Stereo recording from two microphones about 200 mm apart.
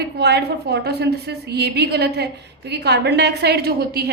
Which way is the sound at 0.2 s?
55° right (ahead or behind).